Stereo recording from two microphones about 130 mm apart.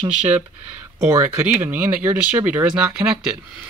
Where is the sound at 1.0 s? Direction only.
20° right (ahead or behind).